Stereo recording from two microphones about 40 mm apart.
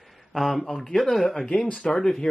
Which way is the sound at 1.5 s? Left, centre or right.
Left.